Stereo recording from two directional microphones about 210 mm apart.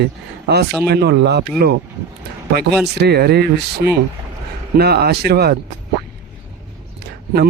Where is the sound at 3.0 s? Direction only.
50° right (ahead or behind).